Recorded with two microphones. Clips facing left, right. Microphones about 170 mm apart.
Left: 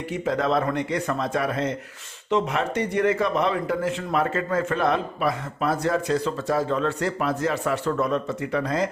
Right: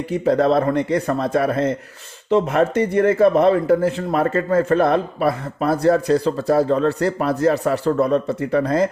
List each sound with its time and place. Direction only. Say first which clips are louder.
0.1 s speech: right 7 dB; 35° right (ahead or behind)